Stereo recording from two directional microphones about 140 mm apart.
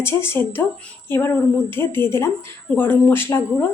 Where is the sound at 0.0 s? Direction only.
20° left (ahead or behind).